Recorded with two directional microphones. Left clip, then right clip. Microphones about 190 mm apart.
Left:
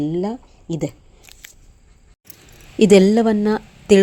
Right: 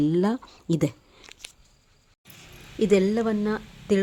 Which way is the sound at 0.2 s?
10° right (ahead or behind).